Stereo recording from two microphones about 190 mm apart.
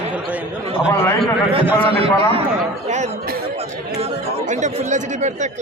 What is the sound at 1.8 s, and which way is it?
Speech, 30° right (ahead or behind).